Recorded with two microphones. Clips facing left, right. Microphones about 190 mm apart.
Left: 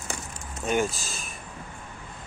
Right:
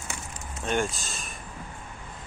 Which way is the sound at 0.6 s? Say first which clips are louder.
Left 2 dB; 5° left (ahead or behind).